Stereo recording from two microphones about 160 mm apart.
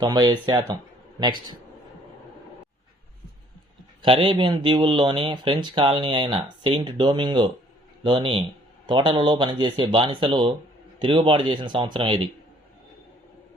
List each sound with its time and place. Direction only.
0.0 s speech: 25° right (ahead or behind)
4.0 s speech: 35° right (ahead or behind)